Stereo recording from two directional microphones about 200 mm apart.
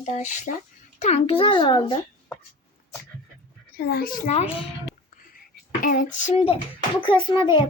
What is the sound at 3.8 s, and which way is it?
Speech, 50° left (ahead or behind).